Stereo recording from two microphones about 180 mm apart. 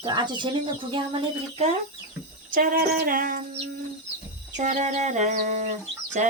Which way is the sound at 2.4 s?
50° right (ahead or behind).